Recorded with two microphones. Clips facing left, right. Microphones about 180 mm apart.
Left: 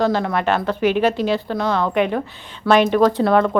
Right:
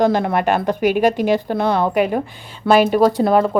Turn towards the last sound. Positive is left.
turn(degrees=-5)  # may be behind; listen again after turning